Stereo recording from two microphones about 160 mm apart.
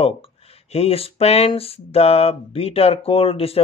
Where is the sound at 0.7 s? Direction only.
40° left (ahead or behind).